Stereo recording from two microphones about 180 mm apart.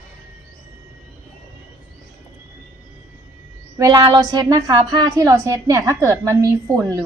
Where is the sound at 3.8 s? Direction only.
20° right (ahead or behind).